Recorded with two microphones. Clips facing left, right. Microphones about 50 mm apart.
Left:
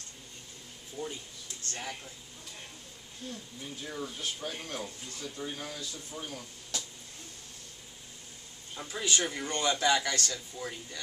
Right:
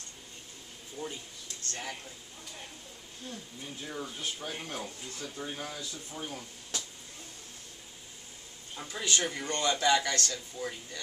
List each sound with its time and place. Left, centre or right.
1.0 s speech: centre
1.7 s a man's voice: centre
3.8 s speech: centre
8.9 s a man's voice: centre